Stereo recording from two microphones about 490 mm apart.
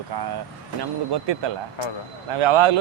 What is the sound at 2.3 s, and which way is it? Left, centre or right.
Speech, right.